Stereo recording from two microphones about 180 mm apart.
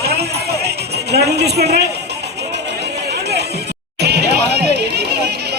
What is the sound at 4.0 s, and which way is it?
Chatter, 70° right (ahead or behind).